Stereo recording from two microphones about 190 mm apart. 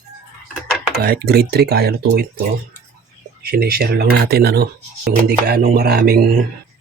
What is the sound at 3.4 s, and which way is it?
Speech, 55° right (ahead or behind).